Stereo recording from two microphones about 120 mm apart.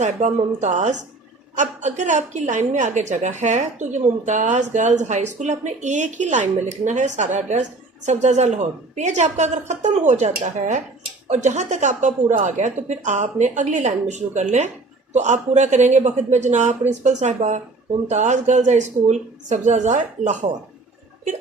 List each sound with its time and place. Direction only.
0.0 s a woman's voice: 80° right